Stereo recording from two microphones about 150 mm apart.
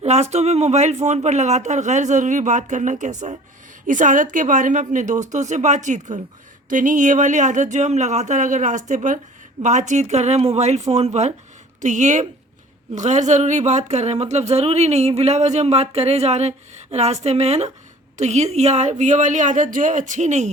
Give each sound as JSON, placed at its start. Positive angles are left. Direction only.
{"t": 0.0, "sound": "speech", "side_deg": -45}